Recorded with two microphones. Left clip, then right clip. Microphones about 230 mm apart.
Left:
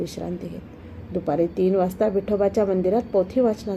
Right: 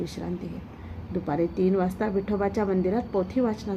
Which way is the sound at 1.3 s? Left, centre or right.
Centre.